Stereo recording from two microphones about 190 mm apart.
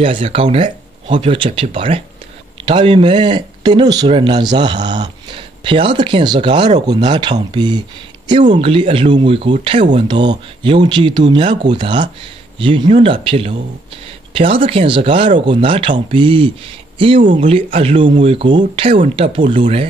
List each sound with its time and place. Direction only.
0.0 s speech: 30° right (ahead or behind)
17.2 s speech: 45° right (ahead or behind)
17.7 s speech: 30° right (ahead or behind)